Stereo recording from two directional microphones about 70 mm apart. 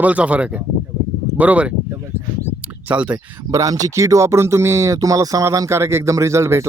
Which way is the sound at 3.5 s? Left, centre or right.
Right.